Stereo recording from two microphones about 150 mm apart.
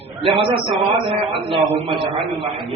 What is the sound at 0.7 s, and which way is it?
Speech, centre (ahead or behind).